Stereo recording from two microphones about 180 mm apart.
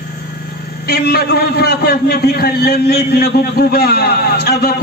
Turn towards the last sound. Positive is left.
turn(degrees=60)  # may be behind; listen again after turning